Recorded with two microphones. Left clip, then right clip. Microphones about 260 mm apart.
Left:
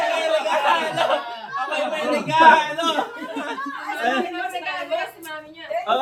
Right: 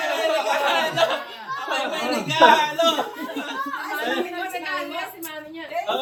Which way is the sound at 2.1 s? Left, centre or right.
Centre.